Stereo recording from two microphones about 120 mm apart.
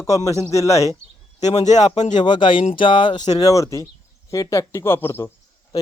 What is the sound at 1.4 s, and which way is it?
Speech, 75° left (ahead or behind).